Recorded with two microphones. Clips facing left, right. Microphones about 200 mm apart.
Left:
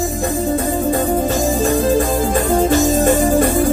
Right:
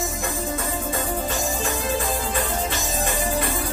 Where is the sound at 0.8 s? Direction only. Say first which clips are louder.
Left 10 dB; 40° left (ahead or behind).